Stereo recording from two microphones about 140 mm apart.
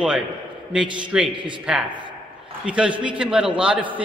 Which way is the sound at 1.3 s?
35° right (ahead or behind).